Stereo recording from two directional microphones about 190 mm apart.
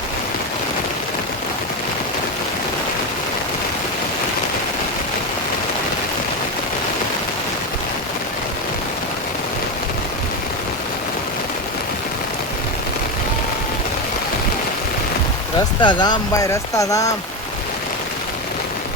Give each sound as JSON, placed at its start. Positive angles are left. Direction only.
{"t": 15.8, "sound": "speech", "side_deg": 25}